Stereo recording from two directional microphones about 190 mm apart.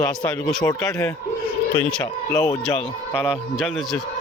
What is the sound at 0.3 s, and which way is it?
Speech, 5° left (ahead or behind).